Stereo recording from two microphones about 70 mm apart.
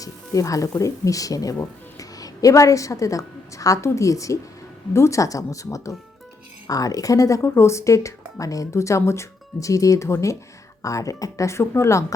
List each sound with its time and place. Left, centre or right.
0.0 s a woman's voice: left
7.4 s a woman's voice: left